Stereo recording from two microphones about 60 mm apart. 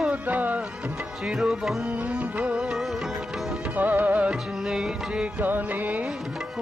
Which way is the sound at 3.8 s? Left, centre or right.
Right.